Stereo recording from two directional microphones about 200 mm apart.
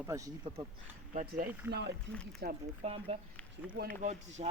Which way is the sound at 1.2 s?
45° right (ahead or behind).